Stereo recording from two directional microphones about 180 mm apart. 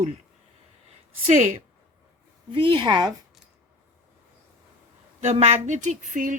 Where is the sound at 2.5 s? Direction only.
30° right (ahead or behind).